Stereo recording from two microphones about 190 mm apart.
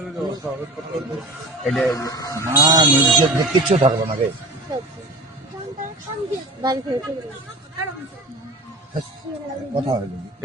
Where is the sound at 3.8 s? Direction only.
40° right (ahead or behind).